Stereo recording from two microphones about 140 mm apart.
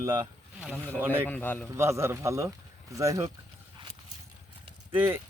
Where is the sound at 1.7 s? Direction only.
20° right (ahead or behind).